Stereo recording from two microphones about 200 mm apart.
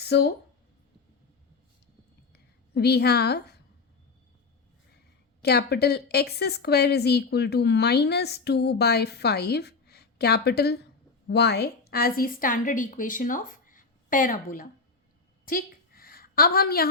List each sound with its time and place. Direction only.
0.0 s speech: 55° left (ahead or behind)
2.7 s a woman's voice: 55° left (ahead or behind)
5.4 s a woman's voice: 55° left (ahead or behind)
15.4 s a sound: 45° left (ahead or behind)